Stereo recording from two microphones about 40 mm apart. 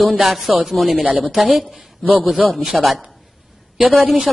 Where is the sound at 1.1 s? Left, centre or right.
Right.